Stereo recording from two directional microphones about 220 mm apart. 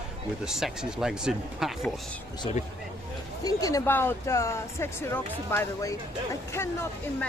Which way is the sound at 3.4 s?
15° left (ahead or behind).